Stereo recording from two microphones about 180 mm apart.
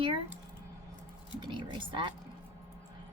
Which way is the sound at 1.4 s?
25° right (ahead or behind).